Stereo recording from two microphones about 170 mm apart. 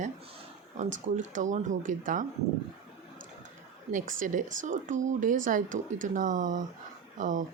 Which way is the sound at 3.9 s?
50° right (ahead or behind).